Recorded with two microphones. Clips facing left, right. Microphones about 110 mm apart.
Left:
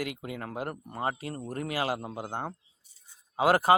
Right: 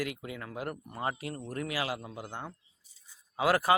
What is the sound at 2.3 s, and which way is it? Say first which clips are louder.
Speech: left 8 dB; 45° left (ahead or behind).